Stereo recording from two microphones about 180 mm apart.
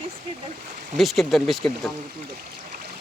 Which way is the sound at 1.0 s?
Centre (ahead or behind).